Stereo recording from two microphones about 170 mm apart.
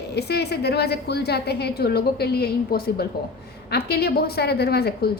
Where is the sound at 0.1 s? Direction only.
75° left (ahead or behind).